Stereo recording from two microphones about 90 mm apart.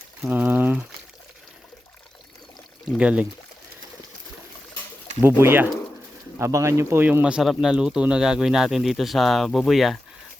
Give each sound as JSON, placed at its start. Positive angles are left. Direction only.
{"t": 0.3, "sound": "speech", "side_deg": -20}
{"t": 3.0, "sound": "speech", "side_deg": -15}
{"t": 5.2, "sound": "speech", "side_deg": -25}
{"t": 6.4, "sound": "speech", "side_deg": -35}
{"t": 7.0, "sound": "speech", "side_deg": -20}